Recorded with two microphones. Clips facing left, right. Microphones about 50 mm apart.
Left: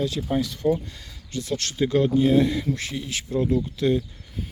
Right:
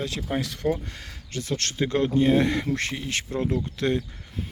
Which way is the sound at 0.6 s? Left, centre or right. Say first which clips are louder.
Left 3 dB; right.